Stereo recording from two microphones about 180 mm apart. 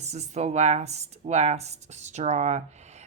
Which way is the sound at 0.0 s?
35° right (ahead or behind).